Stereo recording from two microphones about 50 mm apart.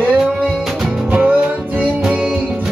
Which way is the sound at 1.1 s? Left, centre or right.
Right.